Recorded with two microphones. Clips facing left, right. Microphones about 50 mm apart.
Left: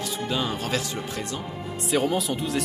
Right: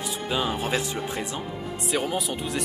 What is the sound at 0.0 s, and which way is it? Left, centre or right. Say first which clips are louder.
Speech: even; centre.